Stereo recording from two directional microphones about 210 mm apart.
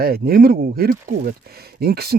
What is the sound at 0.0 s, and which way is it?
Speech, 45° right (ahead or behind).